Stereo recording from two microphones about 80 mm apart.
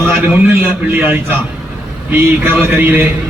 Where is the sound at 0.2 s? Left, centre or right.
Centre.